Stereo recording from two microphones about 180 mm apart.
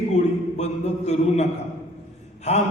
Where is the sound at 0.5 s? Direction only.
40° left (ahead or behind).